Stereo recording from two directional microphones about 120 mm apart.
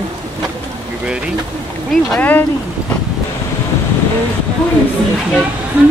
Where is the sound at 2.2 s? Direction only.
15° left (ahead or behind).